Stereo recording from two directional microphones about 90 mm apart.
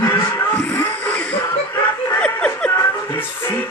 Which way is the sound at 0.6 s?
15° left (ahead or behind).